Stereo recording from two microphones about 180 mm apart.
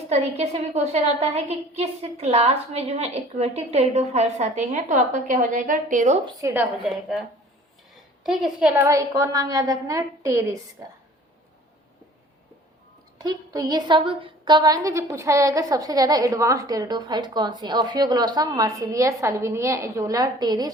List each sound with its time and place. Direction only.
0.1 s a woman's voice: 35° right (ahead or behind)
6.4 s a woman's voice: 10° right (ahead or behind)
13.1 s a woman's voice: 20° right (ahead or behind)